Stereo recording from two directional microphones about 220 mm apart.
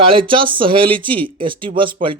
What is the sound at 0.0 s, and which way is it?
A man's voice, 25° right (ahead or behind).